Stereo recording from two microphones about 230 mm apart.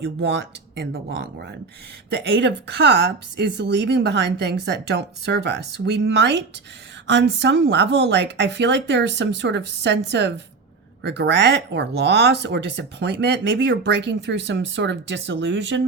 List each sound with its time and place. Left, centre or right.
0.0 s speech: right